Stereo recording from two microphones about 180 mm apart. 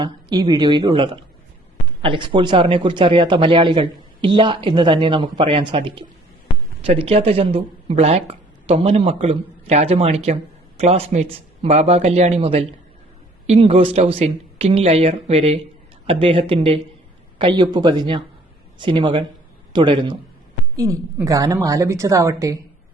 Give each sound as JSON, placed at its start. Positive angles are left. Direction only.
{"t": 0.0, "sound": "a woman's voice", "side_deg": -25}